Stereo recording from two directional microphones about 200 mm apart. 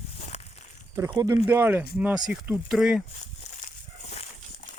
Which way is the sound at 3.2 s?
35° left (ahead or behind).